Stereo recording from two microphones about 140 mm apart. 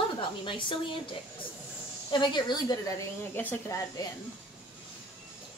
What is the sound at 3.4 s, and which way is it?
Speech, 15° left (ahead or behind).